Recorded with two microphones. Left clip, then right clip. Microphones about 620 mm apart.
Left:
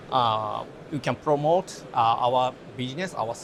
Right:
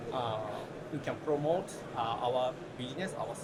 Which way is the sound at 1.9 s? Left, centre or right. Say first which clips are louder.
Left 11 dB; left.